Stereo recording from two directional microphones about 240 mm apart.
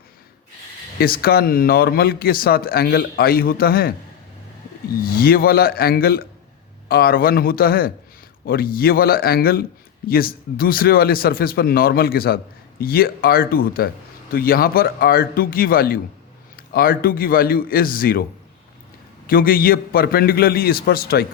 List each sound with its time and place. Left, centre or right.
0.9 s speech: left
5.0 s speech: left
19.3 s speech: left